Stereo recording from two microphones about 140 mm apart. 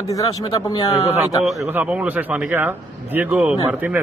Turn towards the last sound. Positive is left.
turn(degrees=-10)  # may be behind; listen again after turning